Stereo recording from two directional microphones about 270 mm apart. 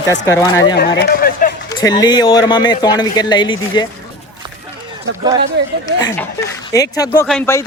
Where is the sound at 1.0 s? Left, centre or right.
Left.